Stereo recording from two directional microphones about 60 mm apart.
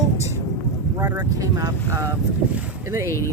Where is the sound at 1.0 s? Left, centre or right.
Right.